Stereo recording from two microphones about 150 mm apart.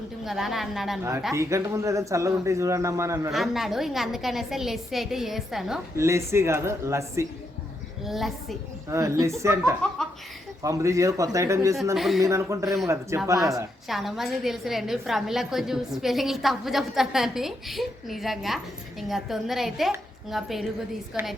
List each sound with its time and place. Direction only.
0.3 s a woman's voice: centre (ahead or behind)
1.3 s speech: 20° right (ahead or behind)
3.3 s a woman's voice: centre (ahead or behind)
6.0 s speech: 20° right (ahead or behind)
8.0 s a woman's voice: centre (ahead or behind)
8.9 s speech: 20° right (ahead or behind)
11.9 s a woman's voice: centre (ahead or behind)
12.2 s speech: 20° right (ahead or behind)
12.6 s a woman's voice: centre (ahead or behind)
13.1 s speech: 20° right (ahead or behind)
13.8 s a woman's voice: centre (ahead or behind)